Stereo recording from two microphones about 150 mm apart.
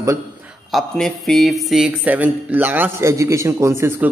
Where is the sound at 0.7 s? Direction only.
Centre (ahead or behind); by 4.1 s 15° right (ahead or behind).